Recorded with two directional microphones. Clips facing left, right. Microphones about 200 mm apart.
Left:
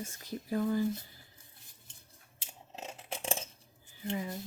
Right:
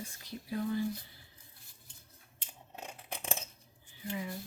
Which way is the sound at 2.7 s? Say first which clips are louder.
Left 2 dB; 25° left (ahead or behind).